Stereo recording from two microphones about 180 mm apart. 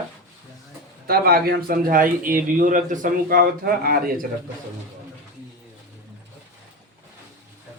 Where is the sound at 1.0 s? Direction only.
55° right (ahead or behind).